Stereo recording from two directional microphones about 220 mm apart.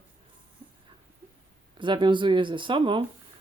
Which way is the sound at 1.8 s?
20° right (ahead or behind).